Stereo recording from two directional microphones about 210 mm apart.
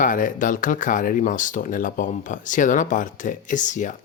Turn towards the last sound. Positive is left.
turn(degrees=35)  # may be behind; listen again after turning